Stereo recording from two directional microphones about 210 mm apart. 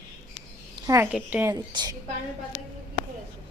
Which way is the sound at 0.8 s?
15° right (ahead or behind).